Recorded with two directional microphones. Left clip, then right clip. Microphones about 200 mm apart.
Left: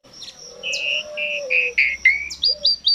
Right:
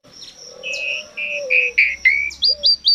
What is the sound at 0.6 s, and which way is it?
Bird, 10° right (ahead or behind).